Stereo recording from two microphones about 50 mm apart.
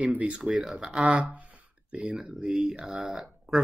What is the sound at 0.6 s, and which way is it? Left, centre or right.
Speech, centre.